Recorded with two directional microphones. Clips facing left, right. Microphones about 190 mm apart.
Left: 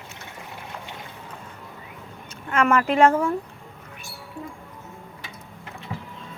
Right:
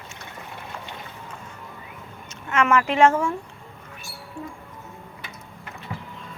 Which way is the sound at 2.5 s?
35° left (ahead or behind).